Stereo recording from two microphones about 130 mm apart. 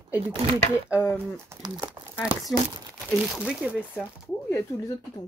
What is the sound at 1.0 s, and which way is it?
Speech, 10° left (ahead or behind).